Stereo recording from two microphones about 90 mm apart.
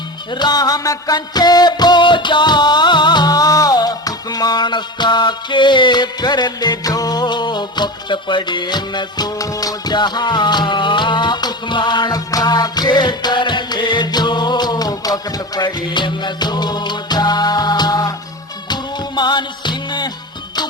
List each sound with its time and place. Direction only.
0.3 s music: 50° left (ahead or behind)